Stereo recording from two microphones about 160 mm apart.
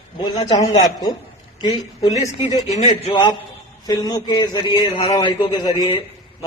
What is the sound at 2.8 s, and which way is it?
A man's voice, 30° left (ahead or behind).